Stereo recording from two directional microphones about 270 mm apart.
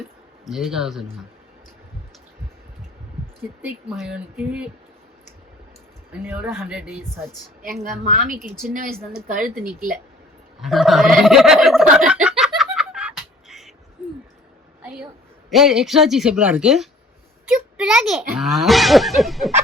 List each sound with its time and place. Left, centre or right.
0.4 s speech: centre
3.6 s speech: centre
6.2 s speech: centre
8.1 s speech: right
10.6 s a sound: centre
14.8 s a sound: centre
15.4 s speech: centre